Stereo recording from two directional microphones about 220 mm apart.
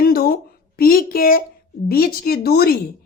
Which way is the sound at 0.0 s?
45° left (ahead or behind).